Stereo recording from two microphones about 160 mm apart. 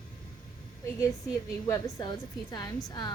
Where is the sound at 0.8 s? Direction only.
20° left (ahead or behind).